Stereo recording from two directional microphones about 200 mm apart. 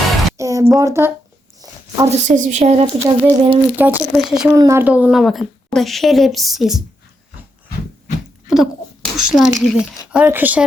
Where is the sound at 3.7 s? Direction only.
5° right (ahead or behind).